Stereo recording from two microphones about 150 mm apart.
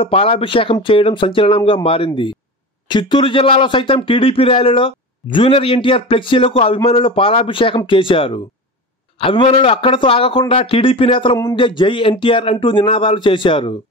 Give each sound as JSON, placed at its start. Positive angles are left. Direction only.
{"t": 0.0, "sound": "speech", "side_deg": 40}